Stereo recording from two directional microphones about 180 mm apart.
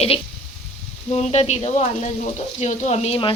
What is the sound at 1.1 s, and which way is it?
Speech, 35° left (ahead or behind).